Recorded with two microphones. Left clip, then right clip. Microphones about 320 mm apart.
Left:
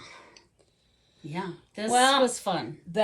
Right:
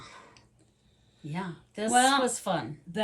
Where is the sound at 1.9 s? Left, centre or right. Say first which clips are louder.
Left 2 dB; centre.